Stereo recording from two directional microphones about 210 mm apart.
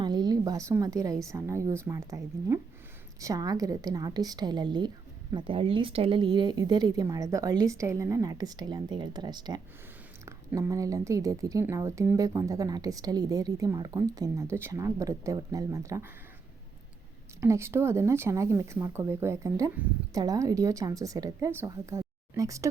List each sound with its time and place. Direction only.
0.0 s a woman's voice: 20° right (ahead or behind)
17.4 s speech: 10° right (ahead or behind)